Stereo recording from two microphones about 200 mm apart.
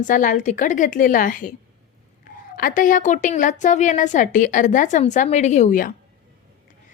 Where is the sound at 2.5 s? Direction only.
45° left (ahead or behind).